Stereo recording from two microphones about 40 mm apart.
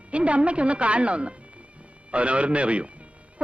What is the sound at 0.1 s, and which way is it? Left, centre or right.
A man's voice, right.